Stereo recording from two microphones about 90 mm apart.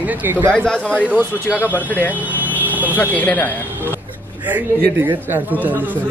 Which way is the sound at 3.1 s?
15° left (ahead or behind).